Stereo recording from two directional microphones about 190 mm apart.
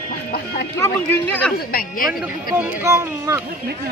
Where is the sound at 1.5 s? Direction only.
50° left (ahead or behind).